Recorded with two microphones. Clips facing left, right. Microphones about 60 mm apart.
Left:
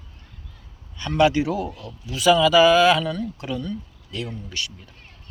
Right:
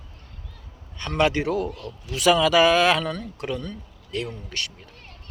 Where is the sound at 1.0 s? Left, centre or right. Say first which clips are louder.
Left 3 dB; right.